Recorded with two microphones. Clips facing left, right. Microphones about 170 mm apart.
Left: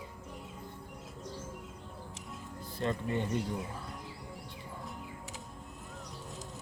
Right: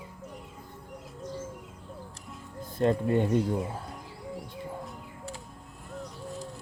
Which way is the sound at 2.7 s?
50° right (ahead or behind).